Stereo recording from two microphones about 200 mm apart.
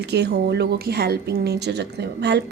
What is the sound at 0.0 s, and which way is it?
A woman's voice, 55° right (ahead or behind).